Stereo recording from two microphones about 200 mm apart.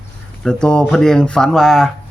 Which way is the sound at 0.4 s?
5° left (ahead or behind).